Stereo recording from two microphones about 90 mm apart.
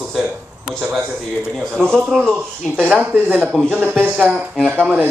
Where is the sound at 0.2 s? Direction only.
5° right (ahead or behind).